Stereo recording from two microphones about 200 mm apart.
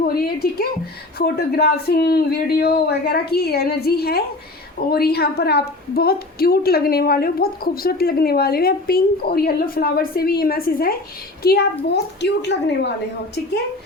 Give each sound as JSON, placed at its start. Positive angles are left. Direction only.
{"t": 0.0, "sound": "a woman's voice", "side_deg": 50}